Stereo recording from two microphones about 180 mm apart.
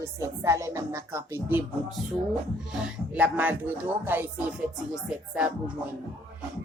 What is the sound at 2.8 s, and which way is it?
Speech, 5° right (ahead or behind).